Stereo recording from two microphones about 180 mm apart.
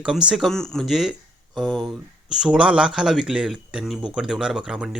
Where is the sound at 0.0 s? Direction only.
5° right (ahead or behind).